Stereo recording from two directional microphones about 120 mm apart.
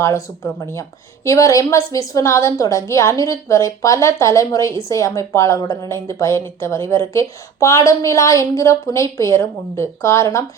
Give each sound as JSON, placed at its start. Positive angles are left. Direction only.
{"t": 0.0, "sound": "a woman's voice", "side_deg": 25}